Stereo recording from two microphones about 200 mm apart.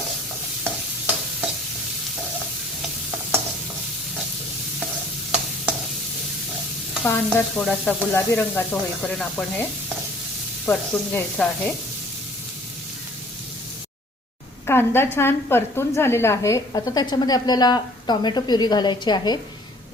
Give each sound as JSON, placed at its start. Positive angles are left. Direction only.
{"t": 0.6, "sound": "stir", "side_deg": -10}
{"t": 7.0, "sound": "stir", "side_deg": 5}
{"t": 8.1, "sound": "sizzle", "side_deg": 10}
{"t": 10.7, "sound": "stir", "side_deg": 5}
{"t": 14.7, "sound": "sizzle", "side_deg": 10}
{"t": 16.0, "sound": "a woman's voice", "side_deg": 10}